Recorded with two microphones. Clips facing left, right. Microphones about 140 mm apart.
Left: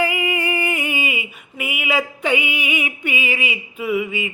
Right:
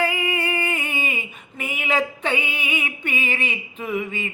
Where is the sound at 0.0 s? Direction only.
15° left (ahead or behind).